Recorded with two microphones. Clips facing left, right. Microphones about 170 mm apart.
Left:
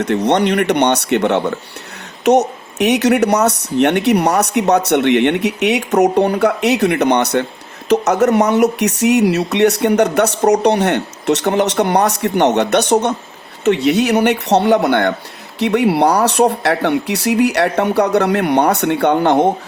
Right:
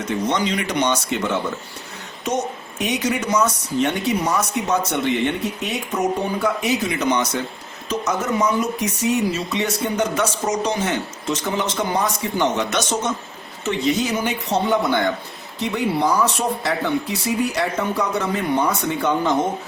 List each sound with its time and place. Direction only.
0.0 s speech: 70° left (ahead or behind)